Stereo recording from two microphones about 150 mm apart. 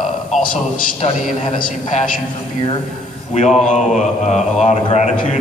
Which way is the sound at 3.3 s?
50° left (ahead or behind).